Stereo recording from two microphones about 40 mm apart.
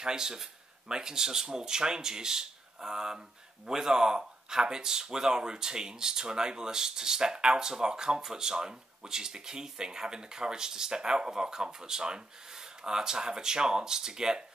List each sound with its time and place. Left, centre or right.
0.0 s speech: centre